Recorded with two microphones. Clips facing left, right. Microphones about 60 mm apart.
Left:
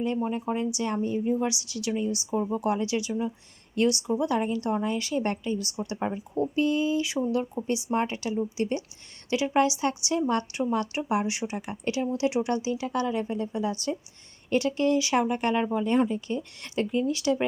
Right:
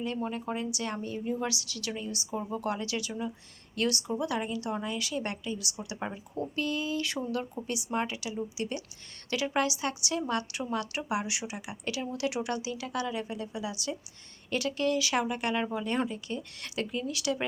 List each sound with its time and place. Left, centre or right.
0.2 s a woman's voice: centre; by 13.9 s left
14.5 s a woman's voice: left
15.7 s a woman's voice: centre